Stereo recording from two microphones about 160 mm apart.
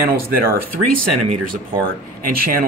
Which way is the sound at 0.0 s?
65° right (ahead or behind).